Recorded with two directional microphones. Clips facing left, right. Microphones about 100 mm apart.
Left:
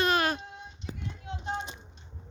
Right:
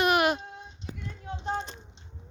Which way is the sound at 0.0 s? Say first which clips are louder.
Right 3 dB; 15° right (ahead or behind).